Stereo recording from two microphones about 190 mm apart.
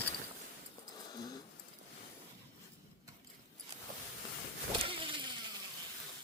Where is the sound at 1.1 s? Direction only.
20° left (ahead or behind).